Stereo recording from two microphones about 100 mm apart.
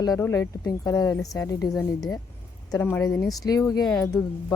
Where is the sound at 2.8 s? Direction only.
20° left (ahead or behind).